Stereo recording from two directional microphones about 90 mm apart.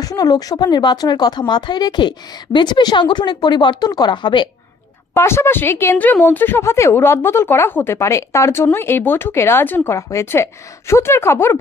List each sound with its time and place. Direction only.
0.0 s speech: 45° left (ahead or behind)
5.1 s speech: 30° left (ahead or behind)
9.8 s speech: 35° left (ahead or behind)